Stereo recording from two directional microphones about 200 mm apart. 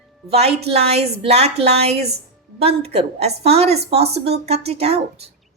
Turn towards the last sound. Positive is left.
turn(degrees=-30)  # may be behind; listen again after turning